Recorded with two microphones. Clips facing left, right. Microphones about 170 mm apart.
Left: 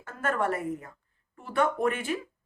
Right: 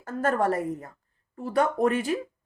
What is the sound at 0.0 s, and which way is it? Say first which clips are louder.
A woman's voice: right 4 dB; 35° right (ahead or behind).